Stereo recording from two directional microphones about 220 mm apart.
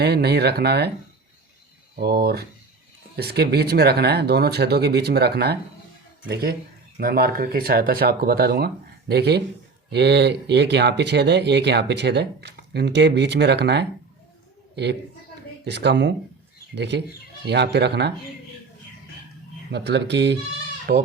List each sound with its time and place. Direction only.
0.0 s speech: 50° right (ahead or behind)
2.0 s speech: 45° right (ahead or behind)
15.6 s speech: 50° right (ahead or behind)
19.7 s speech: 50° right (ahead or behind)
20.9 s speech: 40° right (ahead or behind)